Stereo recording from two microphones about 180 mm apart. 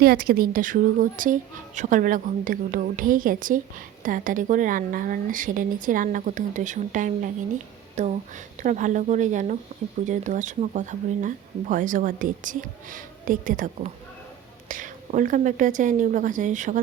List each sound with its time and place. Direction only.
0.0 s speech: 55° right (ahead or behind)